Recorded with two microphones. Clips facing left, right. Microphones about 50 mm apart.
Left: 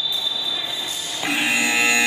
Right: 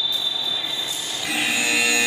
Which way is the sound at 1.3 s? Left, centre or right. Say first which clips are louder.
Left 2 dB; left.